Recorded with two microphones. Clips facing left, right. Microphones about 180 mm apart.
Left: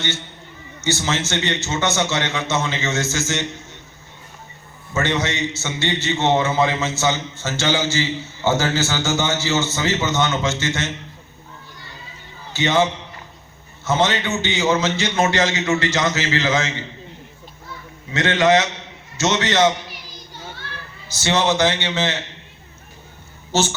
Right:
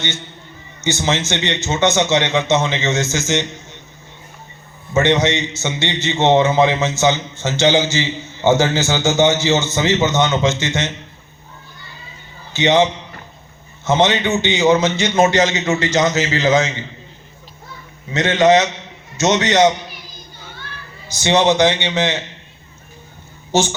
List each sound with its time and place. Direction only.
0.8 s a man's voice: 15° right (ahead or behind)
4.9 s a man's voice: 20° right (ahead or behind)
12.5 s a man's voice: 20° right (ahead or behind)
18.1 s a man's voice: 20° right (ahead or behind)
21.1 s a man's voice: 15° right (ahead or behind)
23.5 s speech: 15° right (ahead or behind)